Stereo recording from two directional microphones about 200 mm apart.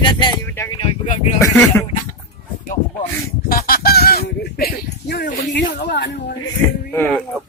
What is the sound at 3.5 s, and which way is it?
Fowl, 45° left (ahead or behind).